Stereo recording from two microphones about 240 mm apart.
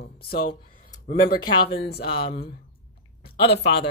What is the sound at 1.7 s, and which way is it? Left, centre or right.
Speech, left.